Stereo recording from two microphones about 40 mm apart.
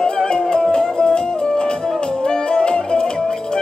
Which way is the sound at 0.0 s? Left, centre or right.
Centre.